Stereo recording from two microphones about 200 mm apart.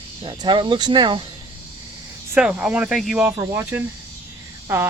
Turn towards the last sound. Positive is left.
turn(degrees=-10)  # may be behind; listen again after turning